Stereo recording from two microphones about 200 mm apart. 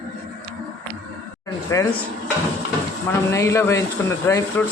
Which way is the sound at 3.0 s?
15° left (ahead or behind).